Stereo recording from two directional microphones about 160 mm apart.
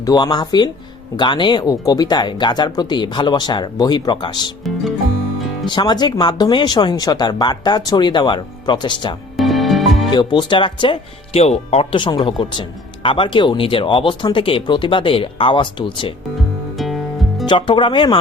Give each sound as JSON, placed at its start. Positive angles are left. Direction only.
{"t": 0.0, "sound": "speech", "side_deg": 25}
{"t": 4.6, "sound": "music", "side_deg": 0}
{"t": 5.6, "sound": "speech", "side_deg": 30}
{"t": 9.4, "sound": "music", "side_deg": 0}
{"t": 10.1, "sound": "speech", "side_deg": 30}
{"t": 16.7, "sound": "music", "side_deg": 0}
{"t": 17.4, "sound": "speech", "side_deg": 30}